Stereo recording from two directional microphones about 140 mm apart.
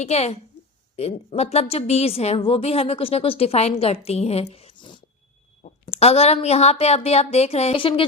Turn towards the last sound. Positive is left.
turn(degrees=40)  # may be behind; listen again after turning